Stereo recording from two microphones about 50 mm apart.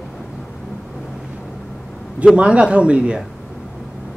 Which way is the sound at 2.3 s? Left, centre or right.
Right.